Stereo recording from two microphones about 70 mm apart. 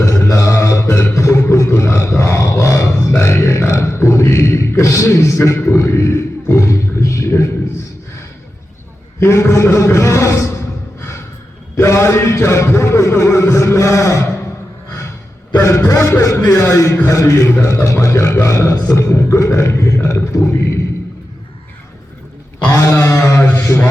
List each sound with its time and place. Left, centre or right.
0.0 s music: left
1.1 s a sound: left
1.8 s roar: left
2.4 s a sound: left
3.1 s grunt: left
3.7 s a sound: left
5.5 s roar: left
9.2 s a man's voice: left
11.8 s a man's voice: left
14.8 s a sound: left
15.9 s a man's voice: left
22.7 s a man's voice: left